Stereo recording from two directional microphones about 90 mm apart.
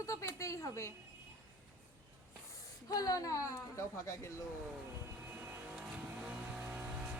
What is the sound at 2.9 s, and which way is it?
Speech, 40° left (ahead or behind).